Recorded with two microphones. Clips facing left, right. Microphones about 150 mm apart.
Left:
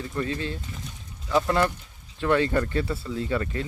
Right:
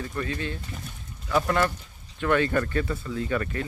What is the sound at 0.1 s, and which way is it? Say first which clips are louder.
Speech: left 2 dB; 25° left (ahead or behind).